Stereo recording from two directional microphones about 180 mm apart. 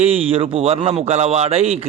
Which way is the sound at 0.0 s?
35° right (ahead or behind).